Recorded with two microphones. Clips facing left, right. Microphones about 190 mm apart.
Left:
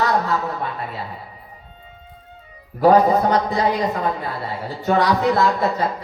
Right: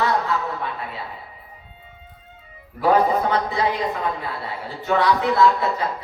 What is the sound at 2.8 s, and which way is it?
Speech, 40° left (ahead or behind).